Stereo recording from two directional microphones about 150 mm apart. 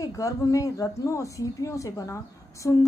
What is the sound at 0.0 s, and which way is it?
A woman's voice, 20° left (ahead or behind).